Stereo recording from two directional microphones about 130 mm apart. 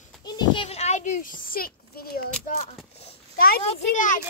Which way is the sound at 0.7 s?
55° left (ahead or behind).